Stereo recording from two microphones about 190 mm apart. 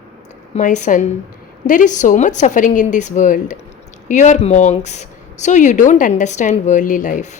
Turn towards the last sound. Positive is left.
turn(degrees=40)  # may be behind; listen again after turning